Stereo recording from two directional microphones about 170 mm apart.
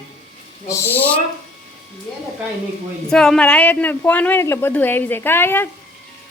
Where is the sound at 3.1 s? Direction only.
5° left (ahead or behind).